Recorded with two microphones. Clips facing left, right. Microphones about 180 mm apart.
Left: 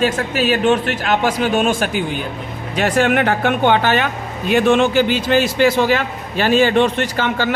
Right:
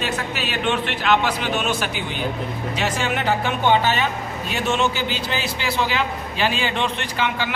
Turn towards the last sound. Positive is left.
turn(degrees=45)  # may be behind; listen again after turning